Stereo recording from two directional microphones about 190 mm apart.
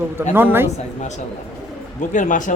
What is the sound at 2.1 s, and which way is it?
Speech, 40° left (ahead or behind).